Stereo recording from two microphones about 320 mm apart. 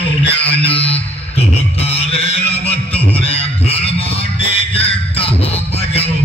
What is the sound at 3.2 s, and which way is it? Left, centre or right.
Livestock, centre.